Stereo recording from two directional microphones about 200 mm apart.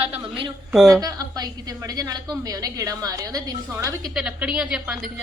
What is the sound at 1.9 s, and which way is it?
A woman's voice, 15° right (ahead or behind).